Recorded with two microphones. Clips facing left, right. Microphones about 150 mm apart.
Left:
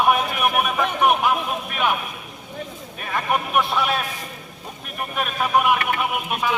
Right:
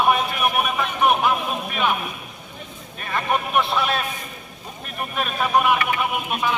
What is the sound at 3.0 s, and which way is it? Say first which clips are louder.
Vehicle: even; 10° left (ahead or behind).